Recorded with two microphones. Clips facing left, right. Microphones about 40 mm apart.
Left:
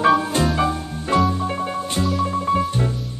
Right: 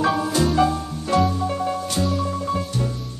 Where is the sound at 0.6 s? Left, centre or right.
Left.